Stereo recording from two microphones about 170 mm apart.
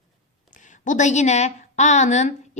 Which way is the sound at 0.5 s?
50° left (ahead or behind).